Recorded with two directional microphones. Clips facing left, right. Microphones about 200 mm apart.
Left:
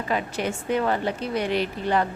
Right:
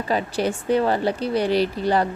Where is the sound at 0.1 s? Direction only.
35° right (ahead or behind).